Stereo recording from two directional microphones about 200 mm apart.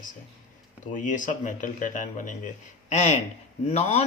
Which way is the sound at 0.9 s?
40° left (ahead or behind).